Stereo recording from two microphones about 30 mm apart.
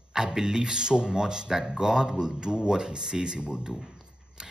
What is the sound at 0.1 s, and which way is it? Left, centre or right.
Speech, right.